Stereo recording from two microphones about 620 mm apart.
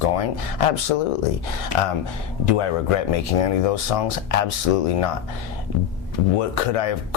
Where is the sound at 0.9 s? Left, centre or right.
Left.